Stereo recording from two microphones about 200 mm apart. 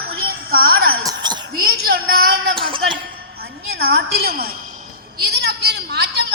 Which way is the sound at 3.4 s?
50° right (ahead or behind).